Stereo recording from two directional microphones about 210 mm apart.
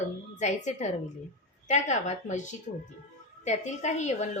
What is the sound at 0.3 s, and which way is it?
Speech, 35° left (ahead or behind).